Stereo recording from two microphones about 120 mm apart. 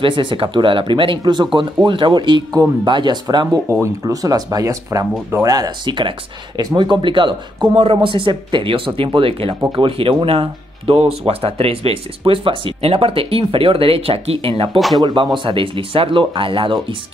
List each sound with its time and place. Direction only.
0.0 s speech: 45° right (ahead or behind)
14.8 s speech: centre (ahead or behind)
15.3 s speech: 45° right (ahead or behind)